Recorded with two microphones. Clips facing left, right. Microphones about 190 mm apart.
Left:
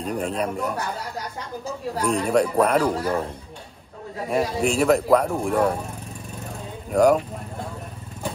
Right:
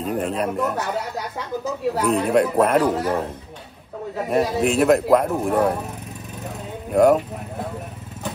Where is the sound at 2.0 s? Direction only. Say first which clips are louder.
Right 1 dB; 5° right (ahead or behind).